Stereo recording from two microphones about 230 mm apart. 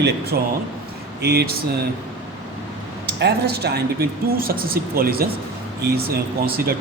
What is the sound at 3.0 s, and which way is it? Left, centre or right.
Speech, right.